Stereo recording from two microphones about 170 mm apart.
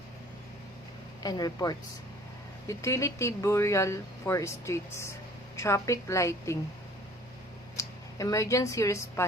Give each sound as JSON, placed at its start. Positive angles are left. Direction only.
{"t": 1.2, "sound": "speech", "side_deg": 20}
{"t": 7.8, "sound": "speech", "side_deg": 20}